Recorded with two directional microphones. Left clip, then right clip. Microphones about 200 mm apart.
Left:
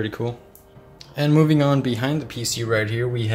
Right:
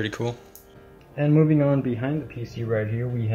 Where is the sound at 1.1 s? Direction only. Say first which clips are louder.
Left 2 dB; 10° left (ahead or behind).